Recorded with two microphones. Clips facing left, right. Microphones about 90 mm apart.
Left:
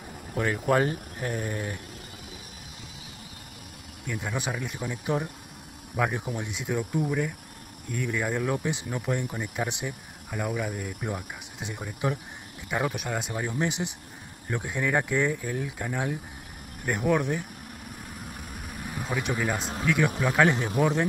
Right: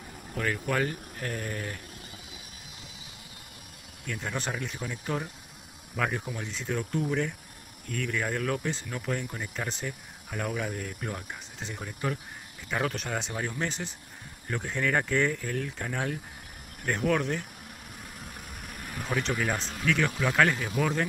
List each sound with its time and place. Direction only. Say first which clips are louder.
0.3 s speech: left 5 dB; 25° left (ahead or behind)
1.2 s speech: left 3 dB; 20° left (ahead or behind)
4.0 s speech: left 2 dB; 10° left (ahead or behind)
18.3 s vehicle: left 3 dB; centre (ahead or behind)
19.8 s speech: left 2 dB; 15° left (ahead or behind)